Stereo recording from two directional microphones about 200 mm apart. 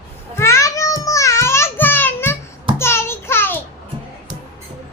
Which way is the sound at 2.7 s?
10° left (ahead or behind).